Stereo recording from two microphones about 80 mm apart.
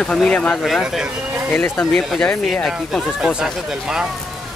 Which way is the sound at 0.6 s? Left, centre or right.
Centre.